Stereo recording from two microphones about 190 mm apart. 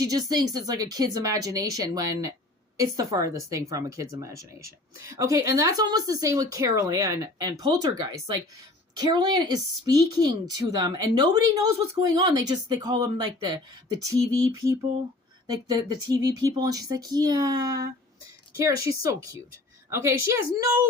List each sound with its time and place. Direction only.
0.0 s a woman's voice: 20° right (ahead or behind)